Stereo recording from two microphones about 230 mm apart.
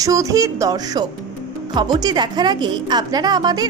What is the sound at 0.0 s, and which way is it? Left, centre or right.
A woman's voice, centre.